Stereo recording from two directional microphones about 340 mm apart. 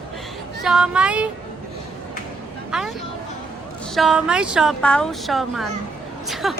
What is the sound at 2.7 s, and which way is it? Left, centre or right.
Speech, centre.